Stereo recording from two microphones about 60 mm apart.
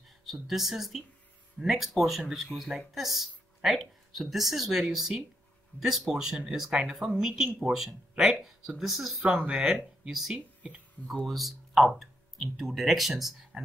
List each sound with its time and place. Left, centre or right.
0.2 s speech: centre
9.2 s speech: right
11.2 s speech: centre